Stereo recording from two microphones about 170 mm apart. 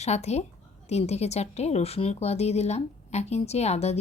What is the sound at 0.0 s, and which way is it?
A woman's voice, 40° left (ahead or behind).